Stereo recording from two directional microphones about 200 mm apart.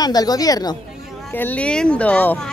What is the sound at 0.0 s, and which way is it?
Speech, 20° left (ahead or behind).